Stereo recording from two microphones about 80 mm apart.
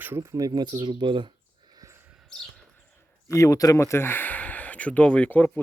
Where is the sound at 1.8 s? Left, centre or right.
Right.